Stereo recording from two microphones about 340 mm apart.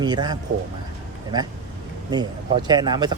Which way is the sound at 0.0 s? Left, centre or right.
Centre.